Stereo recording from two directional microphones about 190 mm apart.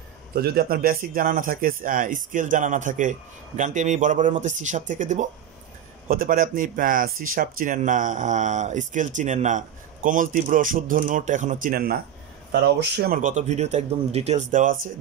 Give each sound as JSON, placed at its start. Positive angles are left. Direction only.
{"t": 0.3, "sound": "speech", "side_deg": -55}
{"t": 12.5, "sound": "speech", "side_deg": -65}